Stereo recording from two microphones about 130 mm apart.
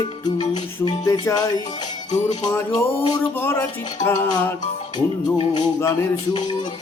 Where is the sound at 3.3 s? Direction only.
15° left (ahead or behind).